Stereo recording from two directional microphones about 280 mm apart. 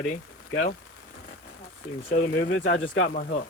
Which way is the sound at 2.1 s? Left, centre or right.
Left.